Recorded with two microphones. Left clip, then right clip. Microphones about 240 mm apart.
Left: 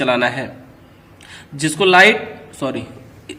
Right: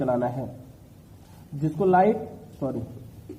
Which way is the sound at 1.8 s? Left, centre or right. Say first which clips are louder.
Left 9 dB; left.